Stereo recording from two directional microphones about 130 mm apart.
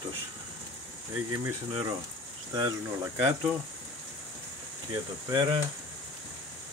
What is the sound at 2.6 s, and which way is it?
Speech, 20° right (ahead or behind).